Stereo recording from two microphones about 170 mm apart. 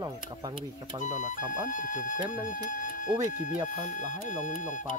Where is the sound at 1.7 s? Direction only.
50° left (ahead or behind).